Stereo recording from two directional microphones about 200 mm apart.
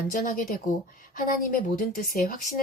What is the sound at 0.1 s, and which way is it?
A woman's voice, 40° left (ahead or behind).